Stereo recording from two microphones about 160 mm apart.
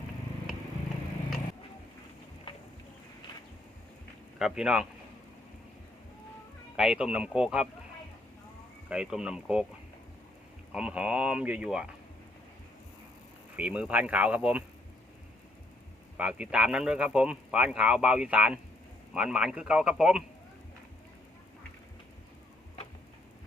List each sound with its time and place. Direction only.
4.4 s a man's voice: 5° right (ahead or behind)
6.7 s a man's voice: 5° right (ahead or behind)
8.9 s a man's voice: 5° right (ahead or behind)
10.7 s speech: 5° right (ahead or behind)
13.6 s speech: 5° right (ahead or behind)
16.1 s a man's voice: 5° right (ahead or behind)